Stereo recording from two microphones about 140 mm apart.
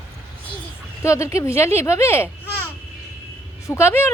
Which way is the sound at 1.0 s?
20° left (ahead or behind).